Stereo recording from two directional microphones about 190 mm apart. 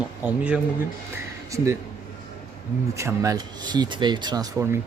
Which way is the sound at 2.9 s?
15° right (ahead or behind).